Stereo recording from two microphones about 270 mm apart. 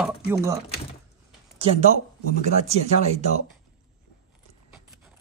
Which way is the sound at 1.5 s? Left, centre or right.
Right.